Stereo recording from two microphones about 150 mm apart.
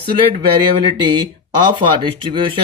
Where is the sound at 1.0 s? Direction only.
30° right (ahead or behind).